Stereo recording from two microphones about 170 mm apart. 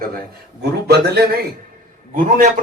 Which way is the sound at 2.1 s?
50° right (ahead or behind).